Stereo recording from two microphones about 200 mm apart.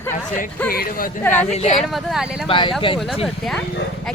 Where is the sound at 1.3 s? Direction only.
35° left (ahead or behind).